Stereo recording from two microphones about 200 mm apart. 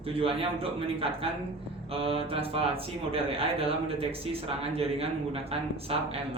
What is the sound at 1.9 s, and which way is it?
A man's voice, 30° right (ahead or behind).